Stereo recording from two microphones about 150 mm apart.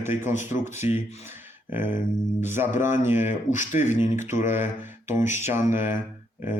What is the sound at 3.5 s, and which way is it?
Speech, 55° left (ahead or behind).